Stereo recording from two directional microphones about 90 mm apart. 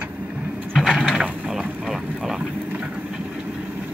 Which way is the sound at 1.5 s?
5° right (ahead or behind).